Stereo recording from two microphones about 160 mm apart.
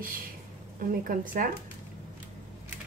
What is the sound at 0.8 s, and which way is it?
Speech, 60° right (ahead or behind).